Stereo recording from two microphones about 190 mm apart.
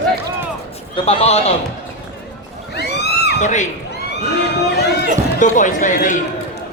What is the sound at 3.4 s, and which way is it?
Speech, 40° left (ahead or behind).